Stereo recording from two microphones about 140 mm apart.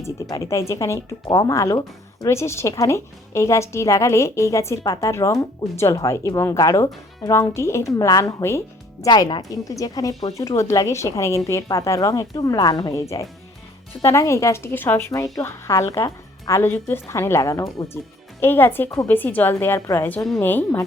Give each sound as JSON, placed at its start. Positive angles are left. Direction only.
{"t": 0.0, "sound": "speech", "side_deg": 20}
{"t": 9.0, "sound": "a woman's voice", "side_deg": 30}